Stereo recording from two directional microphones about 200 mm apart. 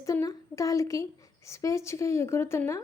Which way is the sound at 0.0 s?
15° left (ahead or behind).